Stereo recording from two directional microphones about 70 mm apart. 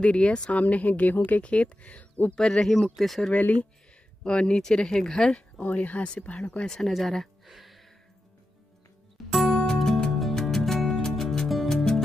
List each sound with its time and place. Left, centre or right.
0.0 s speech: centre
2.3 s speech: centre
3.3 s speech: left
5.6 s speech: left
6.7 s speech: centre
9.3 s music: centre